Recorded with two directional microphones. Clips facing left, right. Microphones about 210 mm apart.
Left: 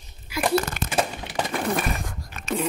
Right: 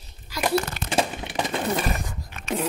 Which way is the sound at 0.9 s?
25° right (ahead or behind).